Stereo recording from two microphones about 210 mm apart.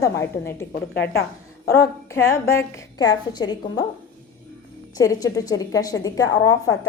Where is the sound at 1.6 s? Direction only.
15° left (ahead or behind).